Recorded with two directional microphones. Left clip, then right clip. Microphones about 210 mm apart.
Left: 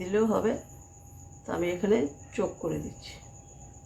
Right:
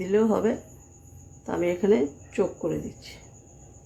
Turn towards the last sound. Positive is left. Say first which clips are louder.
# right 4 dB
turn(degrees=-20)  # may be behind; listen again after turning